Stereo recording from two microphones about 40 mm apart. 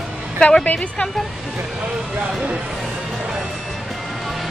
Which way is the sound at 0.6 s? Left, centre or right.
Left.